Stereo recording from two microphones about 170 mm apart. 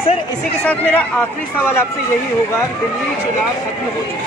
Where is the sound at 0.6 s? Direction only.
10° left (ahead or behind).